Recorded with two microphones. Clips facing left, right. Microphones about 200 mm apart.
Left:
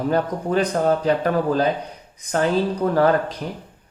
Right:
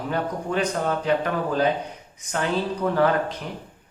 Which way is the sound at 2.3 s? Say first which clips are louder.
Left 5 dB; 40° left (ahead or behind).